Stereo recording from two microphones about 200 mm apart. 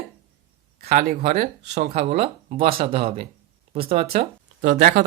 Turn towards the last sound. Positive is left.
turn(degrees=-50)  # may be behind; listen again after turning